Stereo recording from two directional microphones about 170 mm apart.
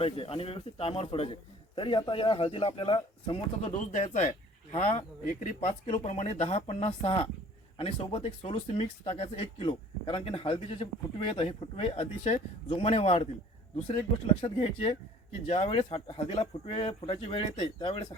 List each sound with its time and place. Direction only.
0.0 s speech: 35° left (ahead or behind)
3.7 s speech: 45° left (ahead or behind)
5.2 s speech: 50° left (ahead or behind)
14.4 s speech: 35° left (ahead or behind)